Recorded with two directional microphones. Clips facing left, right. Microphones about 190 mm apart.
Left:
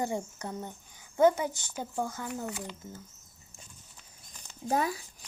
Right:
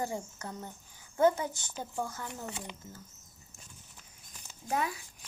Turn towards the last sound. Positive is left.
turn(degrees=35)  # may be behind; listen again after turning